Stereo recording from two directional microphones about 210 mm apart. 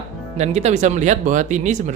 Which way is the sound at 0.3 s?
30° right (ahead or behind).